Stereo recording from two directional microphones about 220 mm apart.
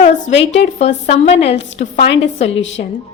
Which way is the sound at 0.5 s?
30° left (ahead or behind).